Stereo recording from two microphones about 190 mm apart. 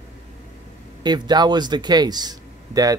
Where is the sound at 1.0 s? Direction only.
20° right (ahead or behind).